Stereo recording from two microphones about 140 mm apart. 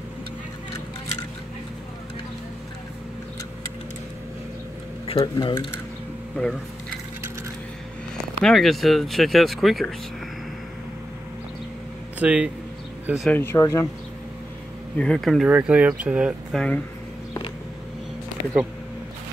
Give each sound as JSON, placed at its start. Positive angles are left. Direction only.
{"t": 5.0, "sound": "a sound", "side_deg": 40}
{"t": 5.3, "sound": "speech", "side_deg": 30}
{"t": 8.4, "sound": "speech", "side_deg": 5}
{"t": 12.2, "sound": "speech", "side_deg": -10}
{"t": 13.3, "sound": "speech", "side_deg": 15}
{"t": 15.0, "sound": "speech", "side_deg": 5}
{"t": 15.4, "sound": "speech", "side_deg": -10}
{"t": 16.5, "sound": "speech", "side_deg": 5}